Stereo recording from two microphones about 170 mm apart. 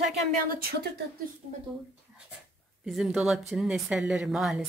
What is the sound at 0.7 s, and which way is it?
Speech, 70° right (ahead or behind).